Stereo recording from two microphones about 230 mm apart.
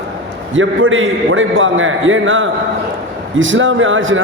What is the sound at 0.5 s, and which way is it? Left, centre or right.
A man's voice, right.